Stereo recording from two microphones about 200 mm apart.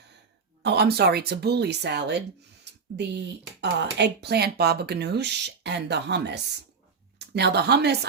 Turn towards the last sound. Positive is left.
turn(degrees=-55)  # may be behind; listen again after turning